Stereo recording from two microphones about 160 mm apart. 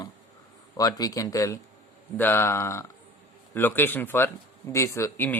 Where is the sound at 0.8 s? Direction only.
25° left (ahead or behind).